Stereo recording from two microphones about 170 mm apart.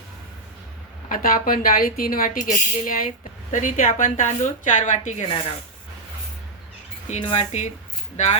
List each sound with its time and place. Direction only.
1.1 s a woman's voice: 55° left (ahead or behind)
7.1 s speech: 40° left (ahead or behind)